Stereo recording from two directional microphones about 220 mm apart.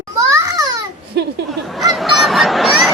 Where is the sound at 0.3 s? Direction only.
15° right (ahead or behind).